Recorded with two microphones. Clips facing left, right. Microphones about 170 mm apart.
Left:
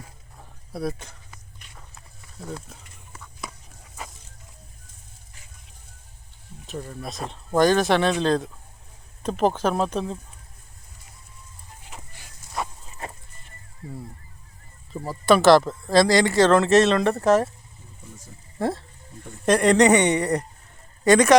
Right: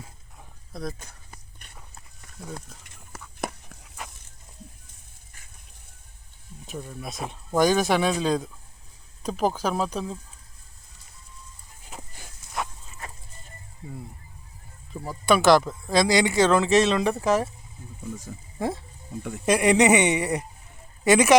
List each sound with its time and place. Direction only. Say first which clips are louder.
0.7 s speech: left 5 dB; 5° left (ahead or behind)
3.4 s a sound: right 7 dB; 55° right (ahead or behind)
6.7 s speech: left 2 dB; centre (ahead or behind)
14.9 s speech: left 3 dB; centre (ahead or behind)
18.6 s speech: left 3 dB; centre (ahead or behind)